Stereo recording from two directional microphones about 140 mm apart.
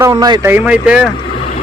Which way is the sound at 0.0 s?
25° right (ahead or behind).